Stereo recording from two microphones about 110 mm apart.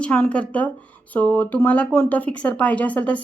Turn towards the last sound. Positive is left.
turn(degrees=15)  # may be behind; listen again after turning